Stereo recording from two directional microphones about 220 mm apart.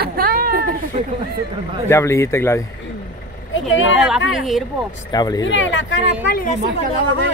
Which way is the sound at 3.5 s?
60° left (ahead or behind).